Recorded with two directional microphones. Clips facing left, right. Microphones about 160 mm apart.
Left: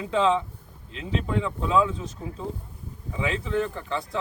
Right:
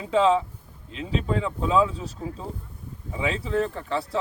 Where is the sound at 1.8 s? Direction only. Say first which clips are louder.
Right 1 dB; 30° right (ahead or behind).